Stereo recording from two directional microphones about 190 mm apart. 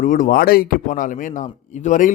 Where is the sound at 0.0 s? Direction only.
45° left (ahead or behind).